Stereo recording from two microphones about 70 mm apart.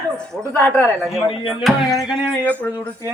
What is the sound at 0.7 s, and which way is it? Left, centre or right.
Speech, left.